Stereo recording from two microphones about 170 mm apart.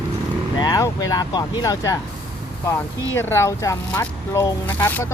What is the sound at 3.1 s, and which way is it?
Speech, 15° left (ahead or behind).